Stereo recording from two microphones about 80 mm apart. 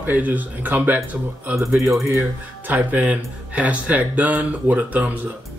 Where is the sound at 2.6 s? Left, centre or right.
Right.